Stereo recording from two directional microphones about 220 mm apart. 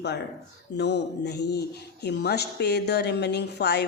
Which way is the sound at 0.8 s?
50° left (ahead or behind).